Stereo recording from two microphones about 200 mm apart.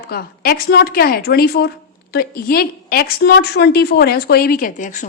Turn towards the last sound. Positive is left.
turn(degrees=40)  # may be behind; listen again after turning